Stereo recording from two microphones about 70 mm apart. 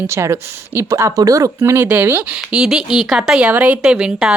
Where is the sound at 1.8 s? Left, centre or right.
Right.